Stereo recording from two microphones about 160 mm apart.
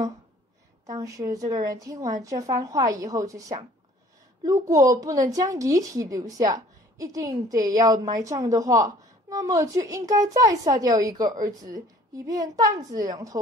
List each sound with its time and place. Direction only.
0.8 s a woman's voice: 20° right (ahead or behind)